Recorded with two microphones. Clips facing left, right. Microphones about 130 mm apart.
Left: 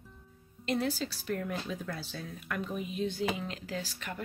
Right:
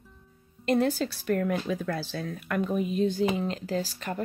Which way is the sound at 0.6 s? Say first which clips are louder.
Right 7 dB; 50° right (ahead or behind).